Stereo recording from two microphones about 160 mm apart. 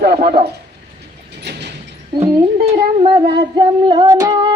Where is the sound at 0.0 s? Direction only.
70° right (ahead or behind).